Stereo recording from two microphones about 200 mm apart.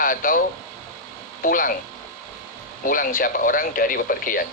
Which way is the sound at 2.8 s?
45° left (ahead or behind).